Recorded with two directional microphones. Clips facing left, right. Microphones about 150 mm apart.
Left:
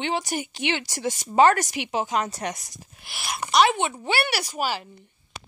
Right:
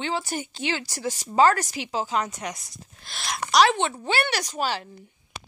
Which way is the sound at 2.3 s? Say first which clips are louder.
Left 3 dB; 35° left (ahead or behind).